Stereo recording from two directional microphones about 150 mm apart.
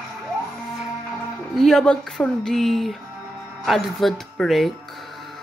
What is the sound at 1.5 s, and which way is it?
A woman's voice, centre (ahead or behind).